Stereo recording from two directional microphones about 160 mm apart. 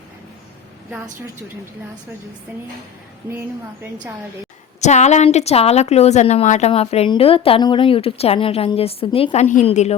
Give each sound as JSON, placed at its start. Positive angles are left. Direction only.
{"t": 4.8, "sound": "a woman's voice", "side_deg": 45}